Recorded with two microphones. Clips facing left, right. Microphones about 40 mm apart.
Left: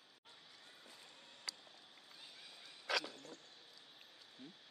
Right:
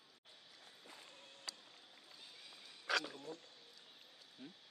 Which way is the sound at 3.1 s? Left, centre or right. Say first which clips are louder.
Right 5 dB; centre.